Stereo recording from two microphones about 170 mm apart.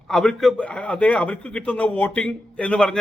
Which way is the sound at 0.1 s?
Centre (ahead or behind).